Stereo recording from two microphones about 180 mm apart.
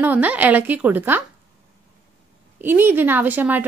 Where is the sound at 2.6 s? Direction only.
10° right (ahead or behind).